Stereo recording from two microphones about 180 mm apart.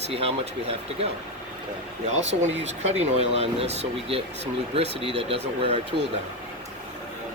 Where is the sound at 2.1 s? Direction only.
40° right (ahead or behind).